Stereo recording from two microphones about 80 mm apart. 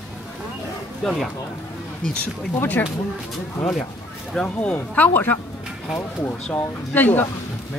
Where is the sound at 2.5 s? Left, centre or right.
Left.